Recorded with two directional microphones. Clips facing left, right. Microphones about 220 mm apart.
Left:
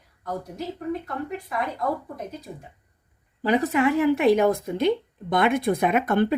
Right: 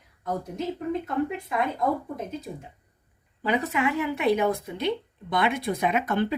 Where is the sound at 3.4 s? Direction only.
40° left (ahead or behind).